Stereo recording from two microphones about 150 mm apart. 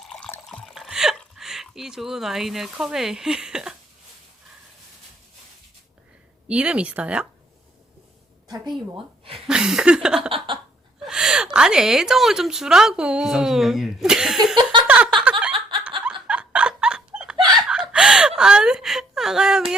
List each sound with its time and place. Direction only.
0.0 s water: 5° left (ahead or behind)
0.4 s speech: 5° left (ahead or behind)
6.5 s speech: 5° right (ahead or behind)
8.4 s a woman's voice: 30° right (ahead or behind)
9.5 s speech: 5° right (ahead or behind)
10.2 s a sound: 35° right (ahead or behind)
11.0 s speech: 5° right (ahead or behind)
14.5 s a sound: 30° right (ahead or behind)
14.8 s a sound: 10° right (ahead or behind)
16.0 s chuckle: 5° right (ahead or behind)
17.7 s whimper: 5° right (ahead or behind)